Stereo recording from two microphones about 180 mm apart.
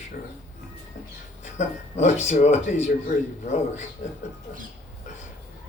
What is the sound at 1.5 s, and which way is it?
Speech, 40° left (ahead or behind).